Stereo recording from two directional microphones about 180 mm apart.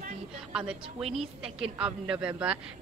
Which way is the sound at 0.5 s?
5° right (ahead or behind).